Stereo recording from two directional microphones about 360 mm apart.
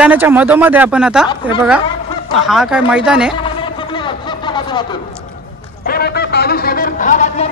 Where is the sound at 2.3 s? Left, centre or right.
Centre.